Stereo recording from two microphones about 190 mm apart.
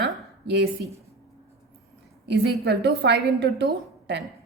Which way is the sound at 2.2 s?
60° right (ahead or behind).